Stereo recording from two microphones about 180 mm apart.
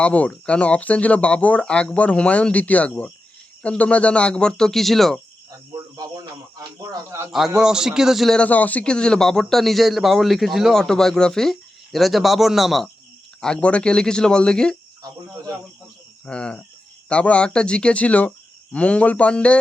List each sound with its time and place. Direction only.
0.0 s a man's voice: 5° left (ahead or behind)
5.5 s speech: 20° right (ahead or behind)
7.3 s a man's voice: centre (ahead or behind)
16.2 s a man's voice: 5° left (ahead or behind)